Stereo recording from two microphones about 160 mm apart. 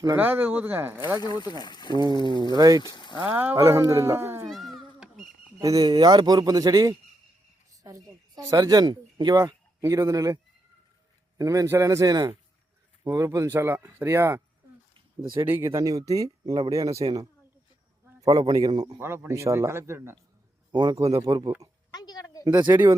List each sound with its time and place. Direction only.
0.0 s speech: 15° right (ahead or behind)
1.2 s speech: 25° left (ahead or behind)
2.2 s a man's voice: 30° right (ahead or behind)
2.8 s speech: 25° left (ahead or behind)
3.2 s speech: 10° right (ahead or behind)
4.4 s a sound: centre (ahead or behind)
5.5 s a man's voice: 20° right (ahead or behind)
7.7 s a sound: 20° right (ahead or behind)
8.4 s a man's voice: 20° right (ahead or behind)
18.3 s a man's voice: 25° right (ahead or behind)
20.7 s a man's voice: 25° right (ahead or behind)
21.9 s a sound: 25° left (ahead or behind)
22.7 s speech: 10° right (ahead or behind)